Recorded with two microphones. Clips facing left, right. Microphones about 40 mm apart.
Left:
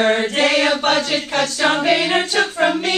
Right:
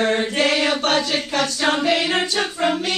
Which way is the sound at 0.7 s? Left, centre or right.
Left.